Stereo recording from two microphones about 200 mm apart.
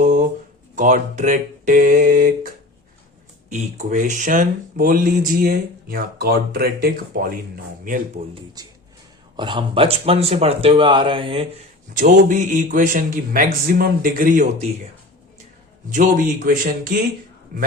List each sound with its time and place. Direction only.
0.0 s a sound: 40° right (ahead or behind)
0.8 s speech: 40° right (ahead or behind)
8.6 s speech: 20° right (ahead or behind)
11.9 s speech: 40° right (ahead or behind)
15.9 s a man's voice: 40° right (ahead or behind)